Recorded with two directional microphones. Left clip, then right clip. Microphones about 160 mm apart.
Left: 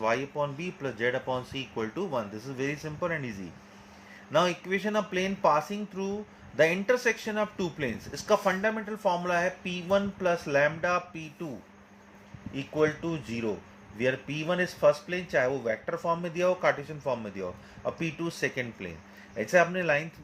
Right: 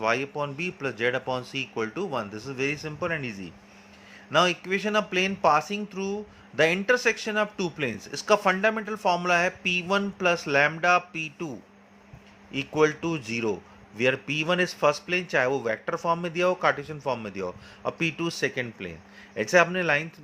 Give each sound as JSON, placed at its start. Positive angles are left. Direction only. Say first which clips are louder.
{"t": 0.0, "sound": "speech", "louder": "right 2 dB", "side_deg": -30}
{"t": 12.5, "sound": "speech", "louder": "right 4 dB", "side_deg": -40}